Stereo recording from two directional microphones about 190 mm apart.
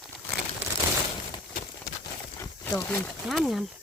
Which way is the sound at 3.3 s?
Centre (ahead or behind).